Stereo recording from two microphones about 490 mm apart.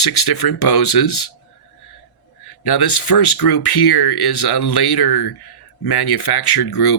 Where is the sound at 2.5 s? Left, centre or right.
Left.